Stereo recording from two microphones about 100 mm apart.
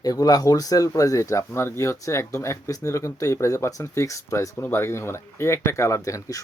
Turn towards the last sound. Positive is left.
turn(degrees=30)  # may be behind; listen again after turning